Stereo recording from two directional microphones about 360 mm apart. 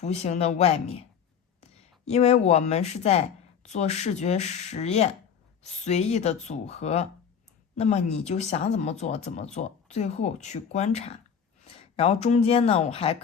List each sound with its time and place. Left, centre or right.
0.0 s speech: centre
2.0 s speech: centre